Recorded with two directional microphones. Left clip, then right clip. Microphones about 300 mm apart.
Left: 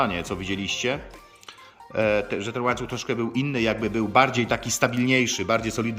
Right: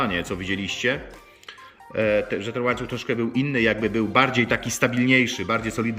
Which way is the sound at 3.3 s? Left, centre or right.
Left.